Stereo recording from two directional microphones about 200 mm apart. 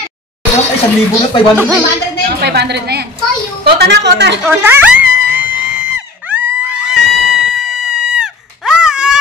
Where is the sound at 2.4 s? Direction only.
55° right (ahead or behind).